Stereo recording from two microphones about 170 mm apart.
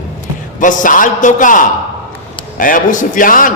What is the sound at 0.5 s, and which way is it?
A man's voice, 50° left (ahead or behind).